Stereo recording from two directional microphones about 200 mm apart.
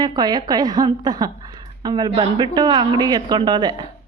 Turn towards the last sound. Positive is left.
turn(degrees=-20)  # may be behind; listen again after turning